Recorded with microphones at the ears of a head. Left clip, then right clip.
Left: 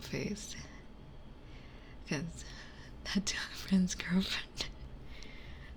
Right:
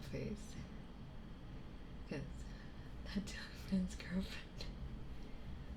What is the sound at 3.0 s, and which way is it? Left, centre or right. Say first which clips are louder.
Speech: left 12 dB; left.